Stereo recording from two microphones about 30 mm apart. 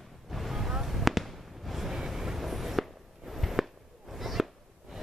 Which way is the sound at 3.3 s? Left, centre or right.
Centre.